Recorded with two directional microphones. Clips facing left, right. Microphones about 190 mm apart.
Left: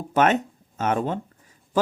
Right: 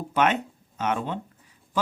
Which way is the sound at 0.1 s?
45° left (ahead or behind).